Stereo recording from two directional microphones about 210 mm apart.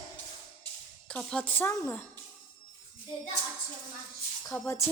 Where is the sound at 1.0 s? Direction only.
5° left (ahead or behind).